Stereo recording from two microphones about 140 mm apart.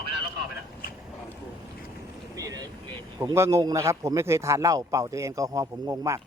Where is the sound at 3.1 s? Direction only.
25° right (ahead or behind).